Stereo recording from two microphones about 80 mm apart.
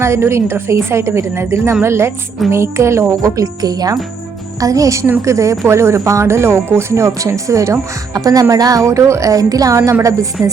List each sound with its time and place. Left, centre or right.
0.0 s speech: right
8.1 s speech: right